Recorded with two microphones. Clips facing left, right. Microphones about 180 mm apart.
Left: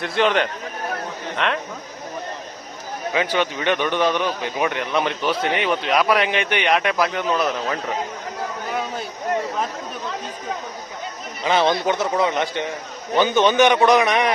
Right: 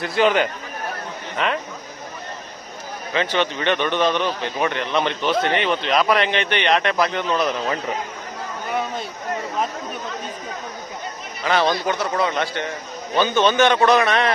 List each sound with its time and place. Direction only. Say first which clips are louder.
0.0 s speech: right 1 dB; centre (ahead or behind)
3.1 s a man's voice: even; 10° left (ahead or behind)
11.4 s a man's voice: left 1 dB; 20° left (ahead or behind)